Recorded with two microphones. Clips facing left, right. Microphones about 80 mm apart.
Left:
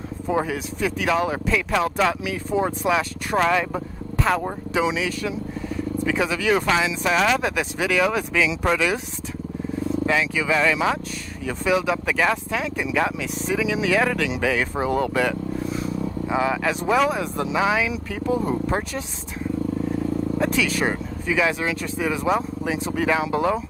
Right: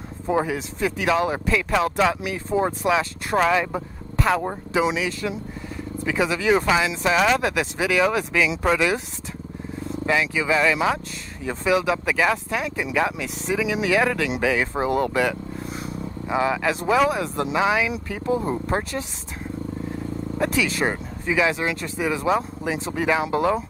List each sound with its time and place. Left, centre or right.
0.3 s speech: centre
1.0 s speech: centre
6.6 s speech: centre
10.3 s speech: centre
10.6 s speech: centre
11.4 s speech: centre
20.3 s speech: centre